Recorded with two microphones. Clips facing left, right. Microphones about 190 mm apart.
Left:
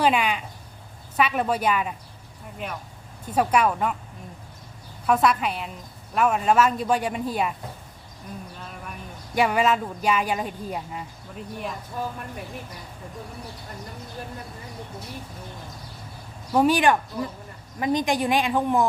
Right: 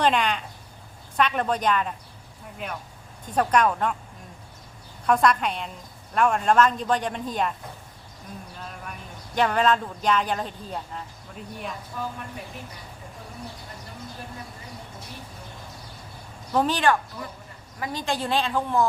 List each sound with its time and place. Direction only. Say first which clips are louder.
0.0 s a man's voice: left 1 dB; 5° left (ahead or behind)
5.0 s a woman's voice: even; 5° left (ahead or behind)
8.5 s speech: even; 5° left (ahead or behind)
11.9 s speech: left 2 dB; 45° left (ahead or behind)
16.5 s a man's voice: left 3 dB; 10° left (ahead or behind)